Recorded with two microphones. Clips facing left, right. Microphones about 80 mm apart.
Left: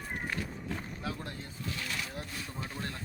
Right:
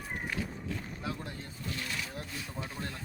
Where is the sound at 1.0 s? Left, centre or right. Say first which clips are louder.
Even; centre.